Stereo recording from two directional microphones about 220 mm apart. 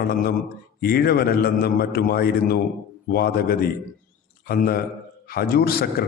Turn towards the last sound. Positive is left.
turn(degrees=45)  # may be behind; listen again after turning